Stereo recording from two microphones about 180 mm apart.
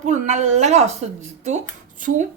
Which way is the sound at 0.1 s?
40° right (ahead or behind).